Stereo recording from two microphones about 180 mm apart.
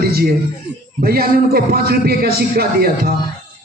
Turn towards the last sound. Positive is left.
turn(degrees=-60)  # may be behind; listen again after turning